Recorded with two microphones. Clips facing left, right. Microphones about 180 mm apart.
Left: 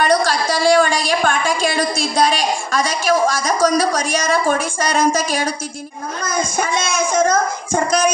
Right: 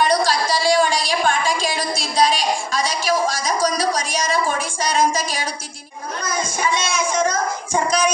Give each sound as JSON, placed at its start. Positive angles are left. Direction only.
{"t": 0.0, "sound": "a woman's voice", "side_deg": 50}